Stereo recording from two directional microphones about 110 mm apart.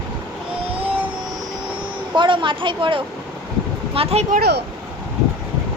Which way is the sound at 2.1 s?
45° right (ahead or behind).